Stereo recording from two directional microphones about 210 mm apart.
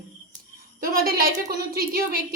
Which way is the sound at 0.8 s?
45° right (ahead or behind).